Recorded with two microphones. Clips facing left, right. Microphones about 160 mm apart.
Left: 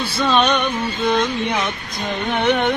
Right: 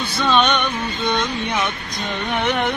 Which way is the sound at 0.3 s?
5° left (ahead or behind).